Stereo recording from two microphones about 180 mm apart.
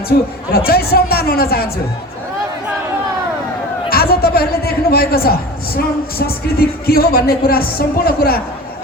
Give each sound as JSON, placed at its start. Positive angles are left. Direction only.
{"t": 0.5, "sound": "a man's voice", "side_deg": 60}
{"t": 3.8, "sound": "a man's voice", "side_deg": 55}